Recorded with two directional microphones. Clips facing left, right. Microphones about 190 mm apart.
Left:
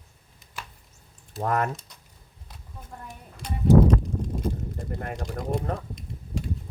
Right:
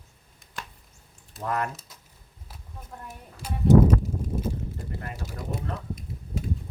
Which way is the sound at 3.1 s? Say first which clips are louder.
Even; 5° right (ahead or behind).